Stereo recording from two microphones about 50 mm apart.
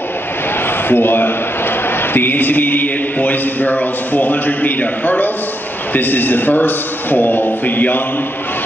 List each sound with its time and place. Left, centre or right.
0.8 s a man's voice: left